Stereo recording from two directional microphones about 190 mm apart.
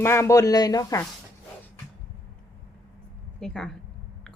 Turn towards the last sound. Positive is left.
turn(degrees=5)  # may be behind; listen again after turning